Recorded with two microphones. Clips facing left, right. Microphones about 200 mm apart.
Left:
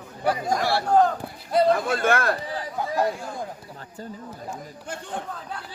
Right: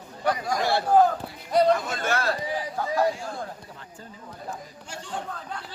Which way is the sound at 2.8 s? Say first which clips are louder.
Even; 15° left (ahead or behind).